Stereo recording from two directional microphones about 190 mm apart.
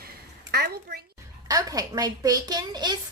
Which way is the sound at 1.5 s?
20° right (ahead or behind).